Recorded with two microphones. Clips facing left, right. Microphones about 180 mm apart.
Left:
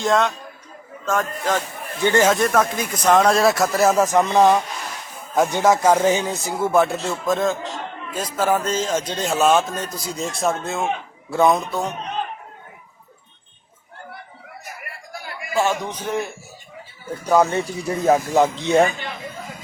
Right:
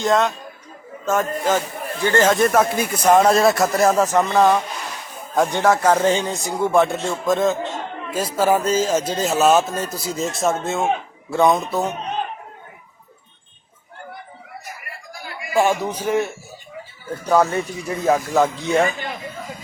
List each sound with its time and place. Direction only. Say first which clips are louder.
0.0 s a man's voice: right 1 dB; centre (ahead or behind)
2.0 s speech: even; 15° left (ahead or behind)
2.3 s a man's voice: right 2 dB; 5° right (ahead or behind)
3.9 s speech: even; 10° left (ahead or behind)
5.3 s a man's voice: even; 5° left (ahead or behind)
15.5 s a man's voice: right 3 dB; 15° right (ahead or behind)
17.2 s speech: even; 10° left (ahead or behind)
17.5 s speech: left 1 dB; 30° left (ahead or behind)